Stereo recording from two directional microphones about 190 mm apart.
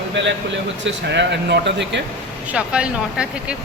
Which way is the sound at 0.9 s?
65° right (ahead or behind).